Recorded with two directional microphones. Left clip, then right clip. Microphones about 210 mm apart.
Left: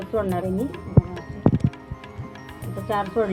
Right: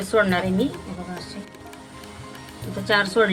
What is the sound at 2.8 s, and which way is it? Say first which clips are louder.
Speech: right 5 dB; 20° right (ahead or behind).